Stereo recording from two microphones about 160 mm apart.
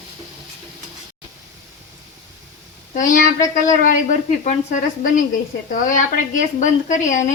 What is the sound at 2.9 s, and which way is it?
A woman's voice, 55° left (ahead or behind).